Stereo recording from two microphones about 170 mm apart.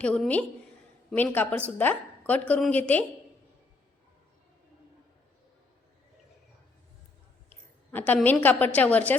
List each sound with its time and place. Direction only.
0.0 s a woman's voice: 5° left (ahead or behind)
7.5 s a woman's voice: 10° left (ahead or behind)